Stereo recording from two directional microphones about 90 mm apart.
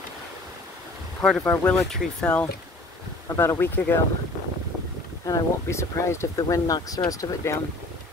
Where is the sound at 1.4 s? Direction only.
20° left (ahead or behind).